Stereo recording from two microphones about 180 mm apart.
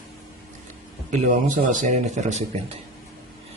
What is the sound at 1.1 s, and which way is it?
Speech, 45° right (ahead or behind).